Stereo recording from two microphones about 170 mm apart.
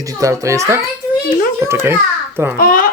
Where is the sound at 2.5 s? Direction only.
55° left (ahead or behind).